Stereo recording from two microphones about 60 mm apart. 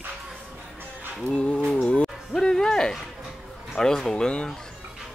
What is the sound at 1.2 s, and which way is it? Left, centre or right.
Speech, centre.